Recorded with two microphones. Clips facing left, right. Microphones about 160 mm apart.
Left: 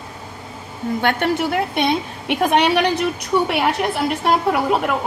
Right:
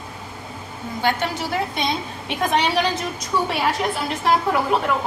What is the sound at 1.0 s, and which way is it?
A woman's voice, 60° left (ahead or behind).